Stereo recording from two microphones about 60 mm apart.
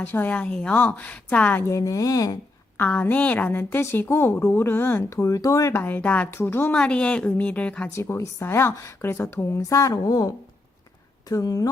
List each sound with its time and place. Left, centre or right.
0.0 s a woman's voice: left
1.6 s speech: left
2.7 s a woman's voice: left
5.0 s speech: left
5.7 s a woman's voice: left
6.3 s a woman's voice: left
6.7 s a woman's voice: centre
7.9 s a woman's voice: left